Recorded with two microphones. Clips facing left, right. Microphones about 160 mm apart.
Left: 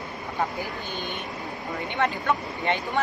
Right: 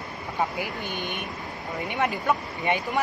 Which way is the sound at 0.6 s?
15° right (ahead or behind).